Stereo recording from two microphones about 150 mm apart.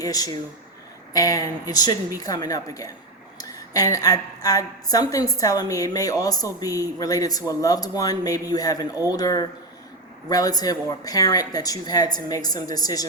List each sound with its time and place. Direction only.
0.0 s a woman's voice: 25° left (ahead or behind)